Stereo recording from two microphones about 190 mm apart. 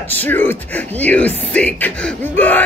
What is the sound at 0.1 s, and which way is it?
Speech, 10° left (ahead or behind).